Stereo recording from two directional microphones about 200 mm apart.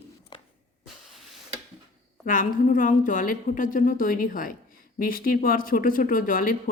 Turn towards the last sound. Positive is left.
turn(degrees=45)  # may be behind; listen again after turning